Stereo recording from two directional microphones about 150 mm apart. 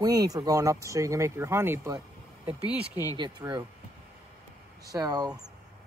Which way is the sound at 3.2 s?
30° right (ahead or behind).